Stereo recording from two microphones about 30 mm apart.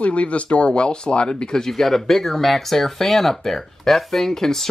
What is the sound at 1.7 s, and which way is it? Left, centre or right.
Speech, centre.